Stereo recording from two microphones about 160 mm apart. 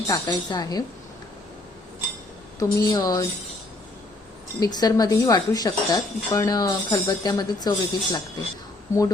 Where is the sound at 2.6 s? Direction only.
25° left (ahead or behind).